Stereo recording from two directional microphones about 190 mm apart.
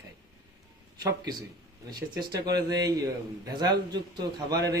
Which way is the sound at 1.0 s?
20° right (ahead or behind).